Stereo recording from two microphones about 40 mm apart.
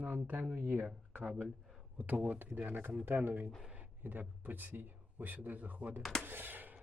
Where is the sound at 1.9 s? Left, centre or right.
Right.